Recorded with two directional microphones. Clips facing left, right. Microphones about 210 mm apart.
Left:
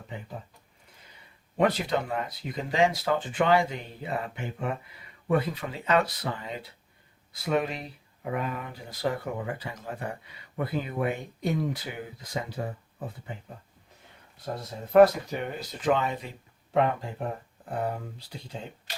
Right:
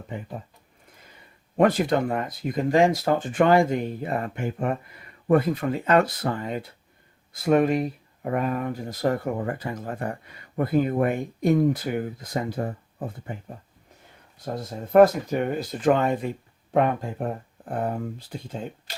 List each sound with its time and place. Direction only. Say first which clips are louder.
1.5 s speech: right 5 dB; 50° right (ahead or behind)
14.9 s speech: right 2 dB; 50° right (ahead or behind)